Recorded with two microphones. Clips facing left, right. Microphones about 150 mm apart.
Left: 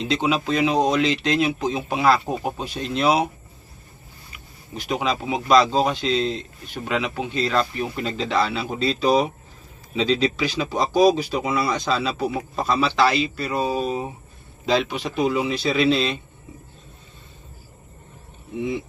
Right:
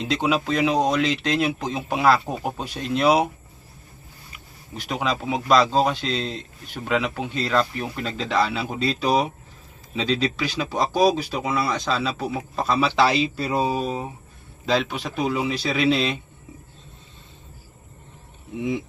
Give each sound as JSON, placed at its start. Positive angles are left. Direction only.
{"t": 0.1, "sound": "speech", "side_deg": -5}
{"t": 4.9, "sound": "speech", "side_deg": 0}
{"t": 13.1, "sound": "speech", "side_deg": -25}
{"t": 14.7, "sound": "speech", "side_deg": 0}